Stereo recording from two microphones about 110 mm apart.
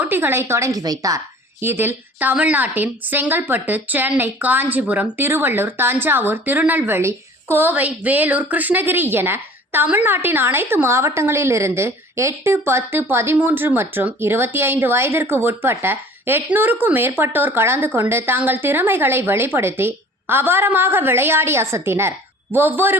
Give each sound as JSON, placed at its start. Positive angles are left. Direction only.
{"t": 0.0, "sound": "a woman's voice", "side_deg": -20}
{"t": 1.6, "sound": "a woman's voice", "side_deg": -20}